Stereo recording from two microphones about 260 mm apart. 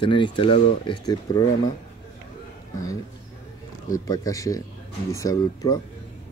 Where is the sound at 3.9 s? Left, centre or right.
Centre.